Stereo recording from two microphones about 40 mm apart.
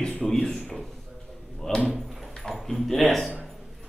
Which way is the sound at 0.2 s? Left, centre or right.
Centre.